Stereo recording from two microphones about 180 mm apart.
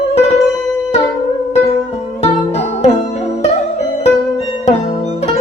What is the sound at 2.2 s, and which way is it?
Music, 35° left (ahead or behind).